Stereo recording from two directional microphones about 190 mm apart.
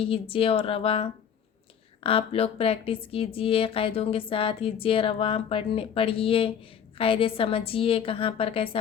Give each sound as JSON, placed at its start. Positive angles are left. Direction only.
{"t": 0.0, "sound": "speech", "side_deg": 30}